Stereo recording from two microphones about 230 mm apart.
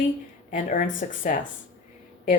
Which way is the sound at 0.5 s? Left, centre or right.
Left.